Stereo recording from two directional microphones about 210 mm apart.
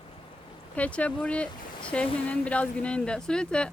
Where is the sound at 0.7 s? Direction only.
5° left (ahead or behind).